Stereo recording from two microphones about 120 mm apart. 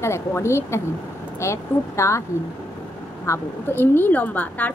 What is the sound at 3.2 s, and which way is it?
A woman's voice, 20° left (ahead or behind).